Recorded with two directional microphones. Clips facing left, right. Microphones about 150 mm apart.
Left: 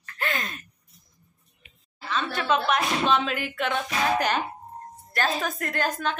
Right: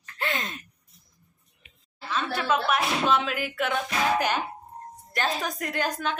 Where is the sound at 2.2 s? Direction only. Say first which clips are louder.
Left 1 dB; 5° right (ahead or behind).